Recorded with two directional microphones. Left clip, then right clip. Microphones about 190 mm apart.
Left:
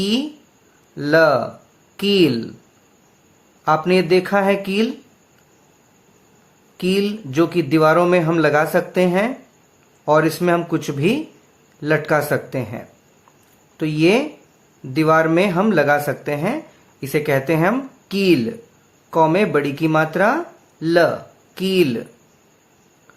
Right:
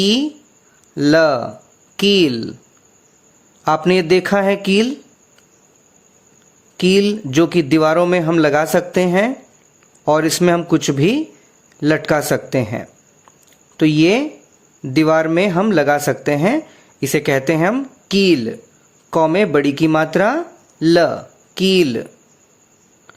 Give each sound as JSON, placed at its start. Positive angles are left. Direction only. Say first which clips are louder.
{"t": 0.0, "sound": "speech", "louder": "right 5 dB", "side_deg": -45}
{"t": 3.6, "sound": "speech", "louder": "right 1 dB", "side_deg": -45}
{"t": 6.7, "sound": "speech", "louder": "right 6 dB", "side_deg": -45}